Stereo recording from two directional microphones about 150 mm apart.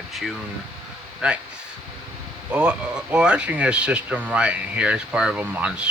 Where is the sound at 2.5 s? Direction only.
5° right (ahead or behind).